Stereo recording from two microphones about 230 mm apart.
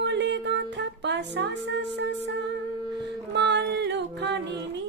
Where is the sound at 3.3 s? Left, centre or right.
Right.